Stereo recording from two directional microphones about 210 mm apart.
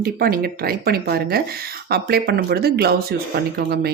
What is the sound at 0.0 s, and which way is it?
Speech, 45° right (ahead or behind).